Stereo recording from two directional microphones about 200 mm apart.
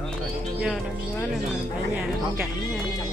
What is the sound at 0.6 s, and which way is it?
Speech, 5° left (ahead or behind).